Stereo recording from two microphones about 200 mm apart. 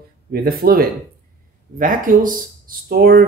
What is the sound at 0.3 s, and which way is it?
Speech, 50° right (ahead or behind).